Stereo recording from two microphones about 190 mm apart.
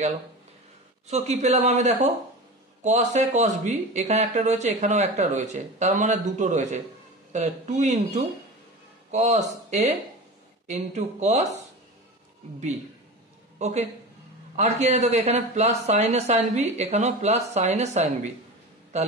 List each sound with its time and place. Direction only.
1.0 s speech: 35° right (ahead or behind)
13.6 s a man's voice: 35° right (ahead or behind)